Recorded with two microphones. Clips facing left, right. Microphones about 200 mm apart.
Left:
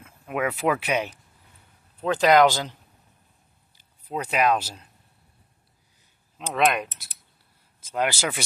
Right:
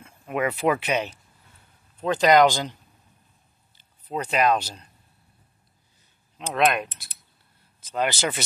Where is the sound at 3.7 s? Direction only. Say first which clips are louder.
Right 1 dB; 10° left (ahead or behind).